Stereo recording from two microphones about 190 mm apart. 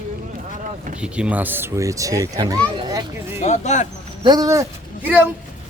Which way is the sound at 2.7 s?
20° right (ahead or behind).